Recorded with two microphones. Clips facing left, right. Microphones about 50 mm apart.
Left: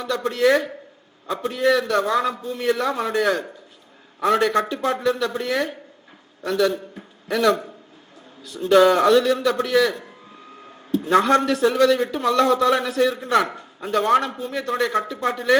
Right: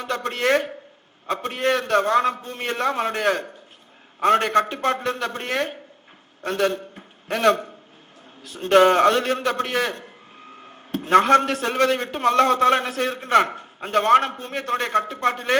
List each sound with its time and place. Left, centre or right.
0.0 s a man's voice: right